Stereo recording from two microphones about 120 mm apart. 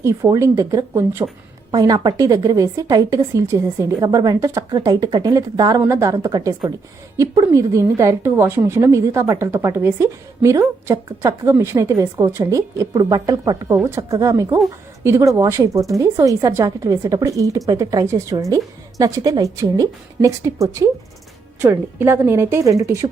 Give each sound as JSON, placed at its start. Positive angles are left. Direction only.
{"t": 0.0, "sound": "a woman's voice", "side_deg": -25}